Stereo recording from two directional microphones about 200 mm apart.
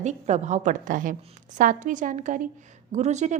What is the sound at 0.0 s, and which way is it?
A woman's voice, 35° right (ahead or behind).